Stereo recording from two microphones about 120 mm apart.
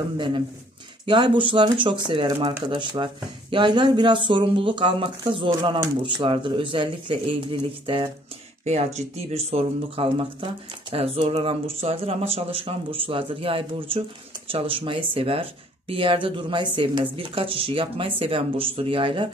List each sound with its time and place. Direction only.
1.0 s speech: 45° right (ahead or behind)
8.6 s speech: 65° right (ahead or behind); by 19.2 s 45° right (ahead or behind)